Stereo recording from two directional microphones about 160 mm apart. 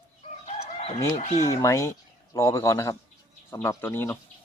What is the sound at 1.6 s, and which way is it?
Speech, 20° left (ahead or behind).